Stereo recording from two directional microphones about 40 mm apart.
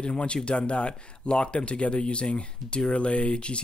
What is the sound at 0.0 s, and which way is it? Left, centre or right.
Speech, left.